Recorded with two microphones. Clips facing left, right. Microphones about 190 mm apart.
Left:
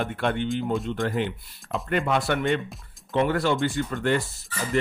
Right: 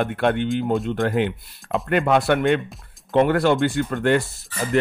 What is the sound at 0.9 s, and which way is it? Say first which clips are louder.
Speech: right 5 dB; 55° right (ahead or behind).